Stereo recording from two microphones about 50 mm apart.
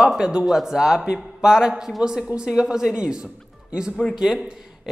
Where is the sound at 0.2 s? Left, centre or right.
Right.